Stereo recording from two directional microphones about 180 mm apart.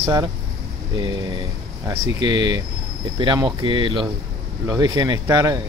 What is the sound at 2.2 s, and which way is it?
Speech, 20° right (ahead or behind).